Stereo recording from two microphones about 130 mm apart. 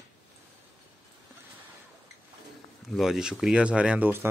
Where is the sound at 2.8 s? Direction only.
Centre (ahead or behind).